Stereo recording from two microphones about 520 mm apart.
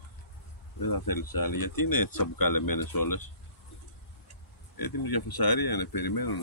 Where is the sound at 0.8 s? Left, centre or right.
Left.